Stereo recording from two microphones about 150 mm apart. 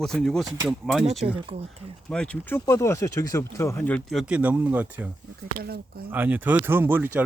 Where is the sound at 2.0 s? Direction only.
5° left (ahead or behind).